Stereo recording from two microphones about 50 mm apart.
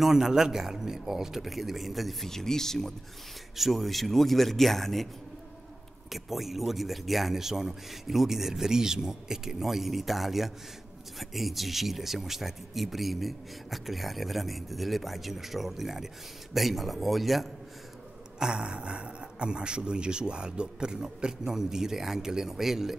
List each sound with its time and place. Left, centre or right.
0.0 s speech: centre
3.5 s speech: centre
6.0 s speech: centre
18.4 s speech: centre